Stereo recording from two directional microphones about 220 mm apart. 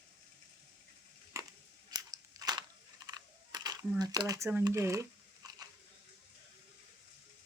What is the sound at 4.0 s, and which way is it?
Speech, 15° right (ahead or behind).